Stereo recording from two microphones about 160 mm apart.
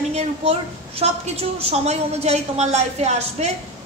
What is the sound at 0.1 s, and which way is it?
A woman's voice, 40° right (ahead or behind).